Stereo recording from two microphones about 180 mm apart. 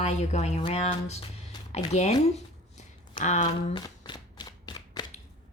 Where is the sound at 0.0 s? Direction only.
40° left (ahead or behind).